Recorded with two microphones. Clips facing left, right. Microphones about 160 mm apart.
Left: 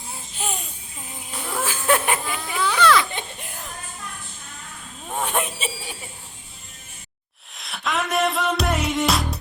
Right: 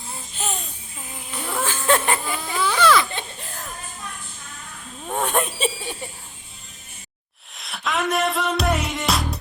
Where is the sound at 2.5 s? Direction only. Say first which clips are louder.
Even; 5° right (ahead or behind).